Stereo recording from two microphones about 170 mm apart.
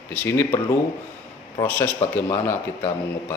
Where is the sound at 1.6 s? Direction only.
10° left (ahead or behind).